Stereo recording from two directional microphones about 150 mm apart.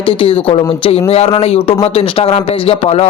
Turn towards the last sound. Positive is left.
turn(degrees=45)  # may be behind; listen again after turning